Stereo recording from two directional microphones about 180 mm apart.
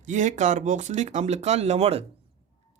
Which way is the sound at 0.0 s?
40° right (ahead or behind).